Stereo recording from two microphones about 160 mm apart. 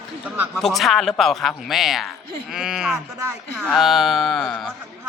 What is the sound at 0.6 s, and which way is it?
Speech, centre (ahead or behind).